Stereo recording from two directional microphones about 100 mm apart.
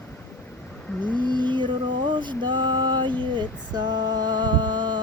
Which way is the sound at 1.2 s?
50° right (ahead or behind).